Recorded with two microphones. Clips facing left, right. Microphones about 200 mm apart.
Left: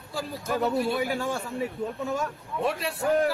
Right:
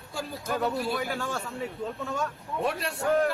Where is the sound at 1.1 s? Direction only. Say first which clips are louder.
Left 3 dB; 15° left (ahead or behind).